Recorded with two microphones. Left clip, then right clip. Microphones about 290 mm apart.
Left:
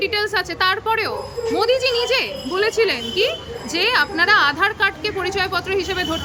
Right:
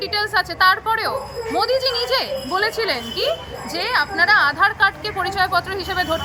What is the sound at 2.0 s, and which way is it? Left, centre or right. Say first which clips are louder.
Speech: even; centre.